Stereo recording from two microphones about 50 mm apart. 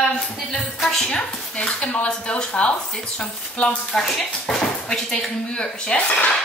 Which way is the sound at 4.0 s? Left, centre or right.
Centre.